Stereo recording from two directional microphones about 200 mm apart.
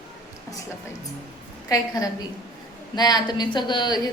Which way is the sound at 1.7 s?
15° left (ahead or behind).